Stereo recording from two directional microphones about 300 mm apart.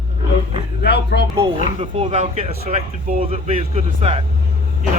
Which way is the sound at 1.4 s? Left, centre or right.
Centre.